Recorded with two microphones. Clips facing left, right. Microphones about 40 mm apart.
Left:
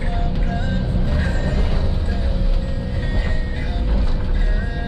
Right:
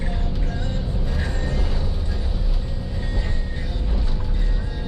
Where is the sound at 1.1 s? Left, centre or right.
Left.